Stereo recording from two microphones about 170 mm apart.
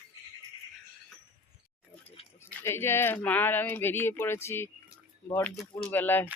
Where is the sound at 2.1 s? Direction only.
35° left (ahead or behind).